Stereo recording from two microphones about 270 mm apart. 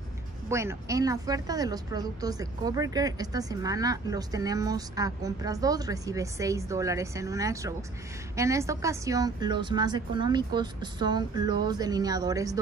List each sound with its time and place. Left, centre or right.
0.5 s a woman's voice: centre